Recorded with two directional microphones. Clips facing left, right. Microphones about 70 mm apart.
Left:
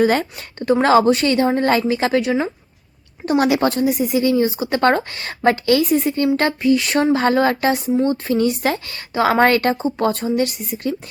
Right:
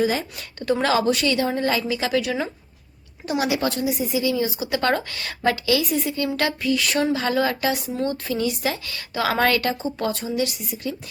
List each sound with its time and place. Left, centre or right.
0.0 s a woman's voice: left
0.3 s a woman's voice: left
3.2 s a woman's voice: left
7.9 s speech: left
8.3 s a woman's voice: left
10.1 s a woman's voice: left